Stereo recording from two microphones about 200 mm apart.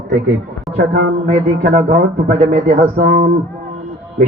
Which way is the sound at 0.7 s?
55° right (ahead or behind).